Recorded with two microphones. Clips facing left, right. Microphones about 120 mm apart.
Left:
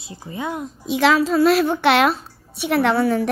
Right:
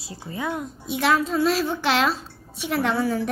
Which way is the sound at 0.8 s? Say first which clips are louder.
Left 5 dB; 90° left.